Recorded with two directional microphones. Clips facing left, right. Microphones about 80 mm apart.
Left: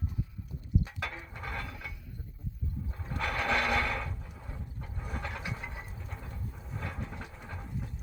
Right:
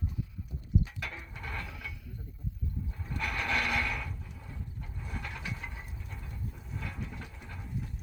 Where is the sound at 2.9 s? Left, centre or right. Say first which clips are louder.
Left 3 dB; left.